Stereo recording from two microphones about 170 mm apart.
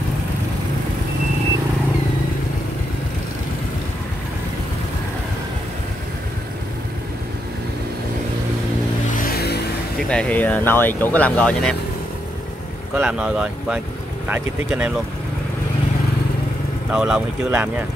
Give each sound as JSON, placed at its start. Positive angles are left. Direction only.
{"t": 9.1, "sound": "vehicle", "side_deg": 60}
{"t": 9.9, "sound": "speech", "side_deg": 5}
{"t": 13.0, "sound": "speech", "side_deg": -5}
{"t": 16.9, "sound": "speech", "side_deg": -5}